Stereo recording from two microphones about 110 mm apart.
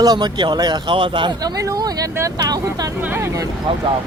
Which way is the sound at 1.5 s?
35° right (ahead or behind).